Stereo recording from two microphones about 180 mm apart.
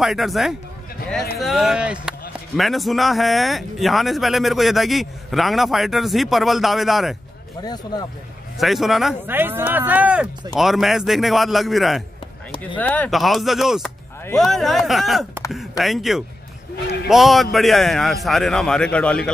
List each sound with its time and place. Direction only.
0.0 s a man's voice: centre (ahead or behind)
7.6 s speech: 20° left (ahead or behind)
8.5 s a man's voice: centre (ahead or behind)
9.3 s a man's voice: 10° right (ahead or behind); by 19.3 s 5° left (ahead or behind)